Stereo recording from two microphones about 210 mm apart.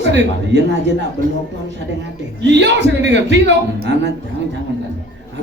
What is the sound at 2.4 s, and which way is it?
Speech, 55° right (ahead or behind).